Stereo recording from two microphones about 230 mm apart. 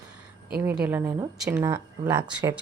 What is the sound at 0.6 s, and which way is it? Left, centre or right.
A woman's voice, centre.